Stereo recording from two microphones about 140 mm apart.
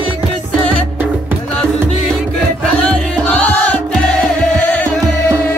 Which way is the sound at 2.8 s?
5° left (ahead or behind).